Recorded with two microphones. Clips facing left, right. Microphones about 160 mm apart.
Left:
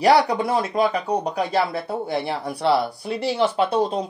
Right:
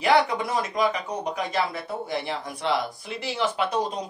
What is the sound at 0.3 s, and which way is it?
Speech, 35° left (ahead or behind).